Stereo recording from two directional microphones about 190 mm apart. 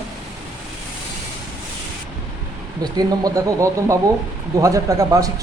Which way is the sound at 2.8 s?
20° right (ahead or behind).